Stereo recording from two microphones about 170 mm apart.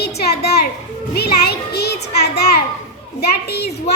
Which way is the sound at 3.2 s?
70° left (ahead or behind).